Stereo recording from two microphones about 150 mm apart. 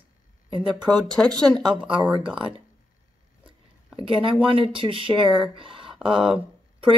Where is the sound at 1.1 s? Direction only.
5° left (ahead or behind).